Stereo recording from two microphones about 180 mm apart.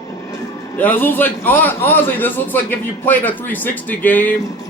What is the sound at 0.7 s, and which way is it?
A man's voice, 10° left (ahead or behind).